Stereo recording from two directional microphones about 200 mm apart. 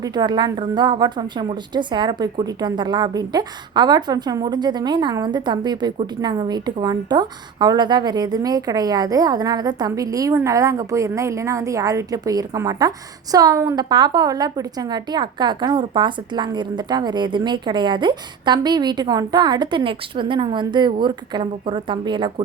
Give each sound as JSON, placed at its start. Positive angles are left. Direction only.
{"t": 0.0, "sound": "a woman's voice", "side_deg": -20}